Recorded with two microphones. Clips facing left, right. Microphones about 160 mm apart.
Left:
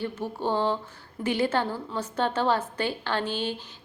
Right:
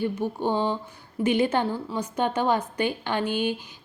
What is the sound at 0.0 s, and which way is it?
A woman's voice, 15° right (ahead or behind).